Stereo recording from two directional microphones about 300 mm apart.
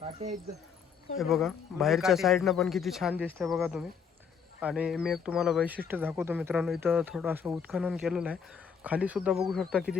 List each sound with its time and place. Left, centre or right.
0.0 s speech: centre
1.2 s speech: centre